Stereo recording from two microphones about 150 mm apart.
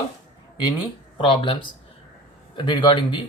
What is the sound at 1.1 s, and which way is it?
Speech, 35° left (ahead or behind).